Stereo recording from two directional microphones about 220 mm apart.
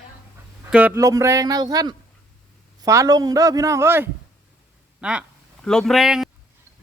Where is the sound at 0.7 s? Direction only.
5° right (ahead or behind).